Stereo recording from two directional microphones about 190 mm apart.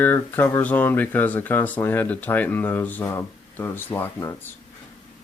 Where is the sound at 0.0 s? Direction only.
10° left (ahead or behind).